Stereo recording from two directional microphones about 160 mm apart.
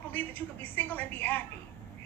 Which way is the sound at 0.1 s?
10° left (ahead or behind).